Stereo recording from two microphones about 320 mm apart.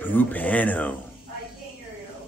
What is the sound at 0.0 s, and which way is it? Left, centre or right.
Speech, centre.